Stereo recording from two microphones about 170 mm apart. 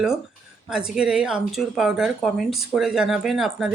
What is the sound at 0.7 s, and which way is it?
Speech, 5° right (ahead or behind).